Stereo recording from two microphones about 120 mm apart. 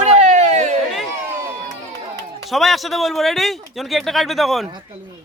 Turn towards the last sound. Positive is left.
turn(degrees=0)  # may be behind; listen again after turning